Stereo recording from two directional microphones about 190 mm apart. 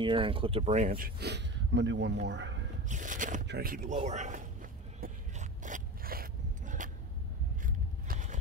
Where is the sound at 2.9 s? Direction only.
40° right (ahead or behind).